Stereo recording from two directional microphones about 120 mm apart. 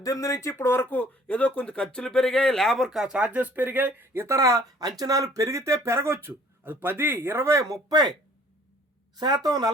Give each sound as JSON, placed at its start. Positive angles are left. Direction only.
{"t": 0.0, "sound": "speech", "side_deg": 30}
{"t": 9.1, "sound": "speech", "side_deg": -35}